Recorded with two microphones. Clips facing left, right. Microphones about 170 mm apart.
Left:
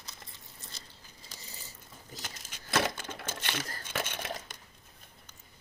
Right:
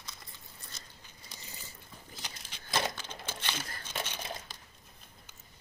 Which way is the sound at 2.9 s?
50° left (ahead or behind).